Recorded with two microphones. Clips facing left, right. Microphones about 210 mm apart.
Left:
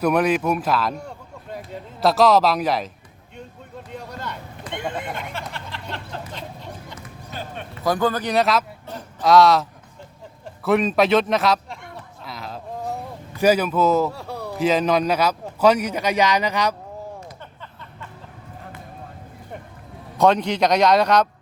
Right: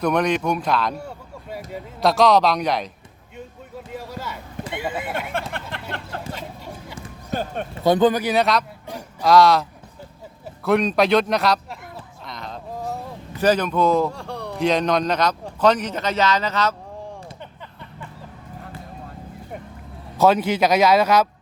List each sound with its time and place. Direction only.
0.0 s speech: 5° left (ahead or behind)
3.9 s a sound: 5° right (ahead or behind)
4.7 s speech: 5° right (ahead or behind)
5.3 s vehicle: 55° right (ahead or behind)
7.3 s speech: 45° right (ahead or behind)
7.9 s speech: 20° right (ahead or behind)
8.2 s speech: centre (ahead or behind)
10.6 s a sound: centre (ahead or behind)
13.4 s a man's voice: 10° left (ahead or behind)
20.1 s speech: 5° right (ahead or behind)